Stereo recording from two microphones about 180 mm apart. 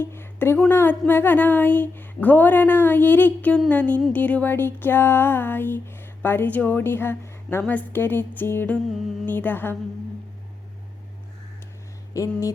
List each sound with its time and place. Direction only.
0.0 s speech: 10° left (ahead or behind)
12.1 s speech: 15° left (ahead or behind)